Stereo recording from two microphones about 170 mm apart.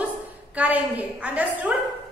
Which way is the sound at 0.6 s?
10° right (ahead or behind).